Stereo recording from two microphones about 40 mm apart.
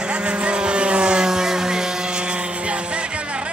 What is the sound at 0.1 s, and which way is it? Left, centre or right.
Vehicle, right.